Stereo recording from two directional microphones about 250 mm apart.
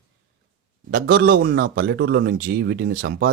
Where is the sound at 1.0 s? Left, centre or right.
Right.